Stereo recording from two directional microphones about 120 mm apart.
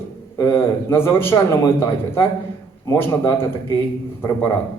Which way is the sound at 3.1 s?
25° left (ahead or behind).